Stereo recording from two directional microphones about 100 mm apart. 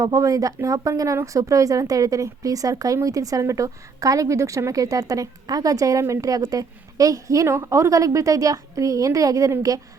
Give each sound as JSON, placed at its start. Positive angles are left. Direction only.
{"t": 0.0, "sound": "speech", "side_deg": -35}